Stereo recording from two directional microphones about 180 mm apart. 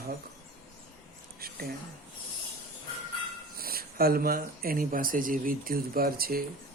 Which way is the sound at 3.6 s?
55° right (ahead or behind).